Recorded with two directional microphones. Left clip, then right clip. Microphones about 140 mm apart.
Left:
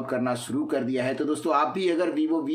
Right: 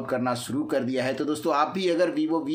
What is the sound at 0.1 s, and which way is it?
Speech, 20° right (ahead or behind).